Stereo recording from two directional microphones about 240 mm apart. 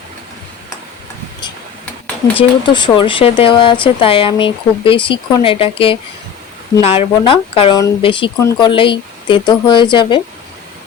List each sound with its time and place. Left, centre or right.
2.4 s speech: centre